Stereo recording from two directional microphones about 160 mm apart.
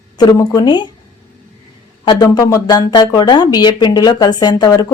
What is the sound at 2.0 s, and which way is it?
Speech, 25° left (ahead or behind).